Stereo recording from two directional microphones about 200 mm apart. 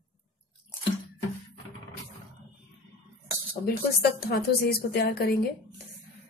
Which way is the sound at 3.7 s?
50° left (ahead or behind).